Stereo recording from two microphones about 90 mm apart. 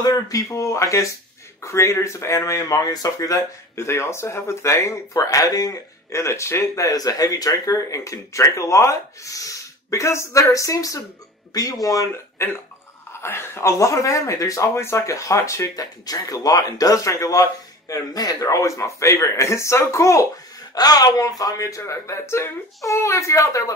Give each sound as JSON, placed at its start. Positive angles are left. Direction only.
{"t": 0.0, "sound": "speech", "side_deg": 45}
{"t": 13.2, "sound": "speech", "side_deg": 30}
{"t": 20.7, "sound": "speech", "side_deg": 45}